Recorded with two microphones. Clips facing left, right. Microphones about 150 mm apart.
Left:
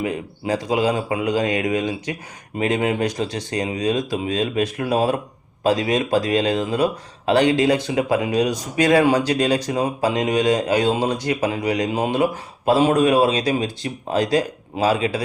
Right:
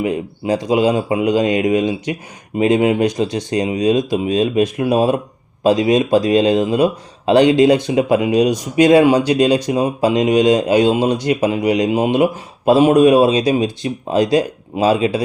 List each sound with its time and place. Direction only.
0.0 s speech: 20° right (ahead or behind)